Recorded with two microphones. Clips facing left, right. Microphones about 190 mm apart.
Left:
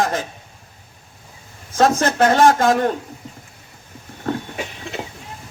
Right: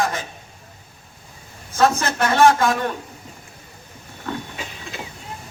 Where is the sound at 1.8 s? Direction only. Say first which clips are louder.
Left 3 dB; 45° left (ahead or behind).